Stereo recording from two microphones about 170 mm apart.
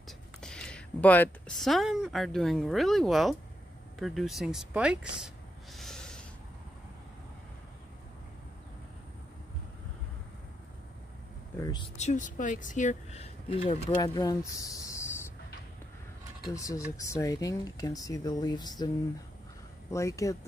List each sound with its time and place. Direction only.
0.4 s speech: 5° left (ahead or behind)
4.0 s a sound: centre (ahead or behind)
11.5 s speech: 25° left (ahead or behind)
12.0 s speech: 45° left (ahead or behind)
13.9 s speech: 20° left (ahead or behind)
16.5 s speech: 20° left (ahead or behind)
19.9 s speech: 15° left (ahead or behind)